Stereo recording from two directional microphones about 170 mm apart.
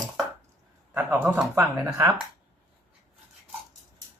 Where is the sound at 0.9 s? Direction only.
10° right (ahead or behind).